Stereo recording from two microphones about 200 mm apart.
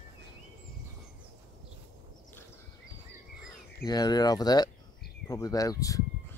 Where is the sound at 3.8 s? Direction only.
20° left (ahead or behind).